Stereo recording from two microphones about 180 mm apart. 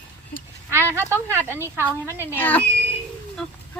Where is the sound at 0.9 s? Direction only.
15° right (ahead or behind).